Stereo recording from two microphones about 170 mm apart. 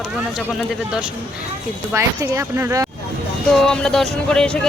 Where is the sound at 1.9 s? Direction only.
15° right (ahead or behind).